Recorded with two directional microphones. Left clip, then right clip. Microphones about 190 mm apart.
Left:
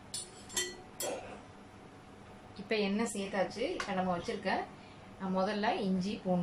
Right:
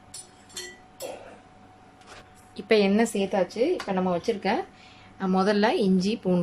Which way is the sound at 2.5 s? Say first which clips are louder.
Right 12 dB; 50° right (ahead or behind).